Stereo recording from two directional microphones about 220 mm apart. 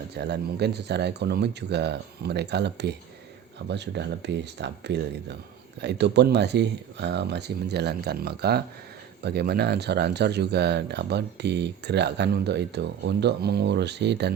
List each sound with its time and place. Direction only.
0.2 s speech: 50° right (ahead or behind)